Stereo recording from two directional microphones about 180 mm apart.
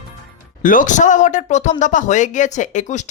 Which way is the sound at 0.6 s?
45° left (ahead or behind).